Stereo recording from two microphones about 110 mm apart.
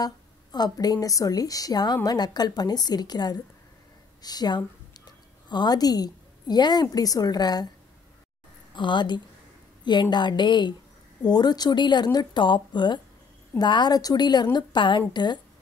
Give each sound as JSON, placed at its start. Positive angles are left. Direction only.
{"t": 0.0, "sound": "a woman's voice", "side_deg": 35}
{"t": 8.7, "sound": "a woman's voice", "side_deg": 45}